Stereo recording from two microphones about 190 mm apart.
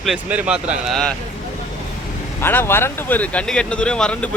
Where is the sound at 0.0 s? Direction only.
5° right (ahead or behind).